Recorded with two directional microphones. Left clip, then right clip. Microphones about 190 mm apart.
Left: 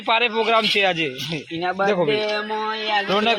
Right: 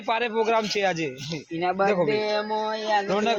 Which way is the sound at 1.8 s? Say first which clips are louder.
Left 4 dB; 45° left (ahead or behind).